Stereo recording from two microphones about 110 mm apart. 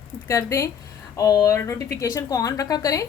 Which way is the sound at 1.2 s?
35° left (ahead or behind).